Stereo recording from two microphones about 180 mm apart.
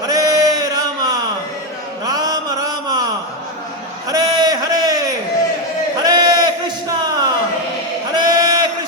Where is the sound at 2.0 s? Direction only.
20° right (ahead or behind).